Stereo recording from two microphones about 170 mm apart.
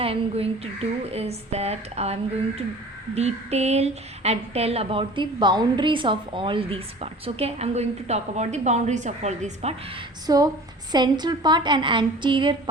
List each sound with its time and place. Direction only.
0.0 s a woman's voice: 35° right (ahead or behind)
3.2 s a woman's voice: 40° right (ahead or behind)
10.2 s a woman's voice: 20° right (ahead or behind)